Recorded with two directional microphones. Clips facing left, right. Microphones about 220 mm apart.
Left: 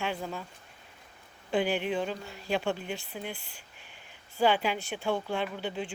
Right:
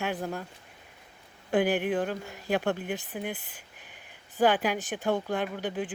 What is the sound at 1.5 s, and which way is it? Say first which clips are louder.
Speech: right 3 dB; 10° right (ahead or behind).